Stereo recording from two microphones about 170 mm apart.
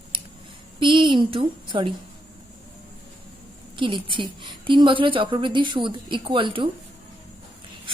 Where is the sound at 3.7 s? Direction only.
30° right (ahead or behind).